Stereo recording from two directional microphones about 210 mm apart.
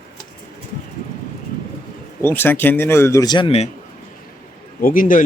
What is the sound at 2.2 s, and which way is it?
A man's voice, 10° left (ahead or behind).